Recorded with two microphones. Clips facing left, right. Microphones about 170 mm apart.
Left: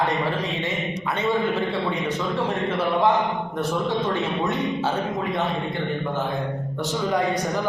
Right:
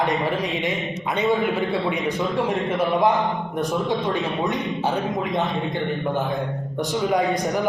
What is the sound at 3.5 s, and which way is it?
A man's voice, 15° right (ahead or behind).